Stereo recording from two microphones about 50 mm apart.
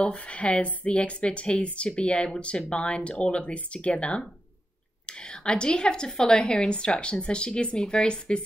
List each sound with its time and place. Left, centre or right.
0.0 s a woman's voice: left